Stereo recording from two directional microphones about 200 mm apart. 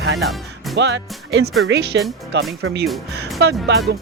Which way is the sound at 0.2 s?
Centre (ahead or behind).